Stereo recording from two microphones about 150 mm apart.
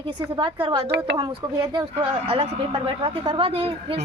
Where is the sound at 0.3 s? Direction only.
35° right (ahead or behind).